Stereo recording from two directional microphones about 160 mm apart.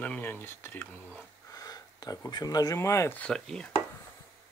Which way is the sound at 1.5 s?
25° left (ahead or behind).